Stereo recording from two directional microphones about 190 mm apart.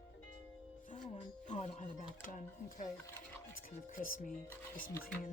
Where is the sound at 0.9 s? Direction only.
35° left (ahead or behind).